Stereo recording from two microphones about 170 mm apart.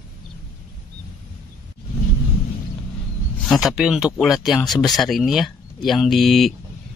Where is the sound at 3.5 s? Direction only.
Centre (ahead or behind).